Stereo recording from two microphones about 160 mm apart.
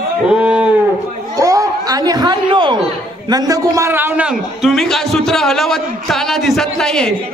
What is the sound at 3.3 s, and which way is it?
A man's voice, 25° right (ahead or behind).